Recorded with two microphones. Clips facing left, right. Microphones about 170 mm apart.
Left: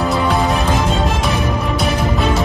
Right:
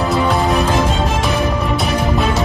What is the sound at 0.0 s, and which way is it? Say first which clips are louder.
Music: right 1 dB; centre (ahead or behind).